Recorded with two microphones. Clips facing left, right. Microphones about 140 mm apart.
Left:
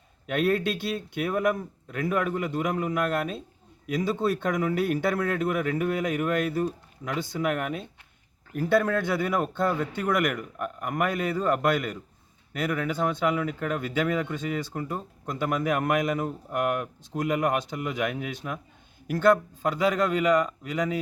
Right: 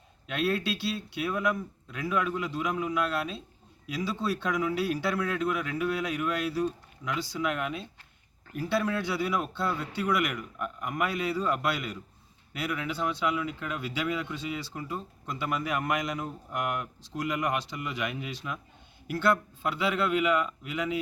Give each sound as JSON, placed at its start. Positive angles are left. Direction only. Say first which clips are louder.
{"t": 0.3, "sound": "a man's voice", "louder": "left 4 dB", "side_deg": 50}